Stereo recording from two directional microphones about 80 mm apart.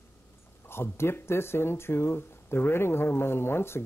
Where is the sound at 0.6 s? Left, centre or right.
Left.